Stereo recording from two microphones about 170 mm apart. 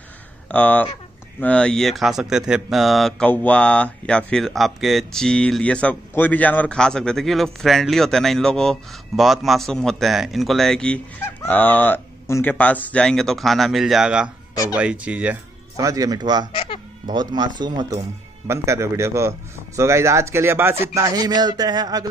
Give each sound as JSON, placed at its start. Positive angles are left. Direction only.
{"t": 0.5, "sound": "a man's voice", "side_deg": 10}
{"t": 15.7, "sound": "a man's voice", "side_deg": -20}
{"t": 16.5, "sound": "a sound", "side_deg": 30}
{"t": 17.1, "sound": "a man's voice", "side_deg": -25}